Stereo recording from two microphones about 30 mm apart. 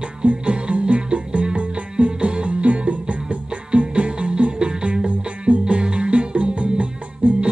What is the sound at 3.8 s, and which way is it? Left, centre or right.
Music, right.